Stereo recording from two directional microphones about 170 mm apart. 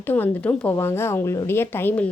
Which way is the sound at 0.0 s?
10° left (ahead or behind).